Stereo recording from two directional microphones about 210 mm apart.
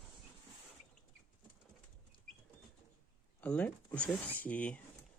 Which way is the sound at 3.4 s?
5° left (ahead or behind).